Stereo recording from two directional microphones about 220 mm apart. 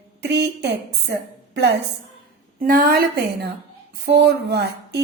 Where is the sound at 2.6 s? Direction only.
40° right (ahead or behind).